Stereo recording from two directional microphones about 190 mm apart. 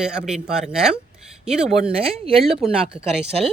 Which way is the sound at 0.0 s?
5° right (ahead or behind).